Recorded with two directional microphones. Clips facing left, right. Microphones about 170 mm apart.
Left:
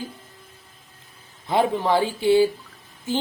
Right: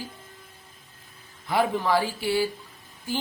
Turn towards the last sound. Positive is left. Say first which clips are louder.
# left 5 dB
turn(degrees=20)  # may be behind; listen again after turning